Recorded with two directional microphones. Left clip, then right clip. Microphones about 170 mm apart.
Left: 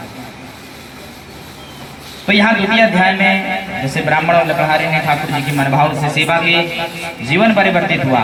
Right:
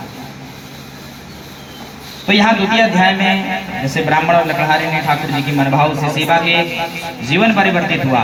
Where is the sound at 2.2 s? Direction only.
30° left (ahead or behind).